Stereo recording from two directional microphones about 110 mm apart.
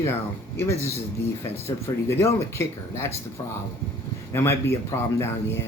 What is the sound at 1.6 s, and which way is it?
Speech, 20° left (ahead or behind).